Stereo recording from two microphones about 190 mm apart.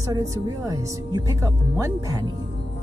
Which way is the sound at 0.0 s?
20° right (ahead or behind).